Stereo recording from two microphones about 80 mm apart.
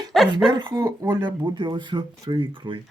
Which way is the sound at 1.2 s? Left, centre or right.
Right.